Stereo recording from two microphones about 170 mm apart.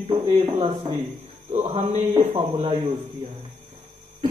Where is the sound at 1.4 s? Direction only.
40° right (ahead or behind).